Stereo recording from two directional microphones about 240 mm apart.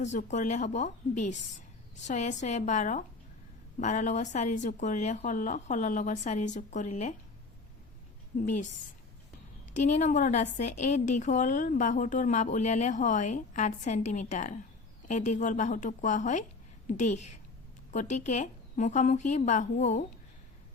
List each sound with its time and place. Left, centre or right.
0.0 s a woman's voice: left
8.4 s a woman's voice: left
9.7 s a woman's voice: left